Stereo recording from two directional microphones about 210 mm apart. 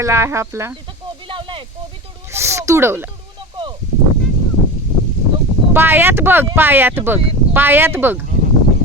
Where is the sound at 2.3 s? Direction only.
10° right (ahead or behind).